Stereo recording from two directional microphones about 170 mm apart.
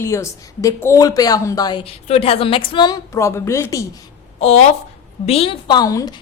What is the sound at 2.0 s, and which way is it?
Speech, 35° left (ahead or behind).